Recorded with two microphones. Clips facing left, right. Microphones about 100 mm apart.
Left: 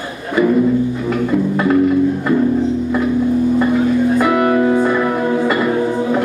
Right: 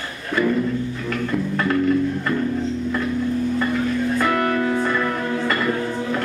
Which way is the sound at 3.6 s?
15° left (ahead or behind).